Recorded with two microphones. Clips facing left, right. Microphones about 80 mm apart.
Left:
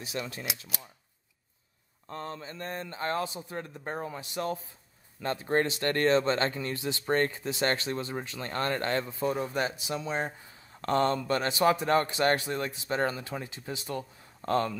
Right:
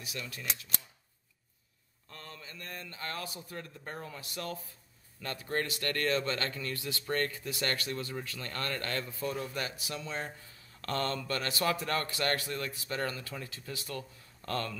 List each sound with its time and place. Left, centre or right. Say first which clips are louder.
0.0 s a man's voice: left 6 dB; left
2.0 s a man's voice: left 10 dB; left